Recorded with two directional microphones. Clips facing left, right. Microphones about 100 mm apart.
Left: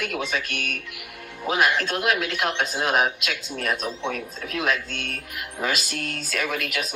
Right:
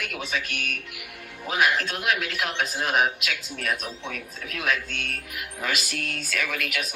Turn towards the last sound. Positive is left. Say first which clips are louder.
# left 3 dB
turn(degrees=30)  # may be behind; listen again after turning